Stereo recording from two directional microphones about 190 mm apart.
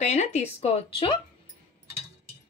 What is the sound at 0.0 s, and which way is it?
Speech, 35° left (ahead or behind).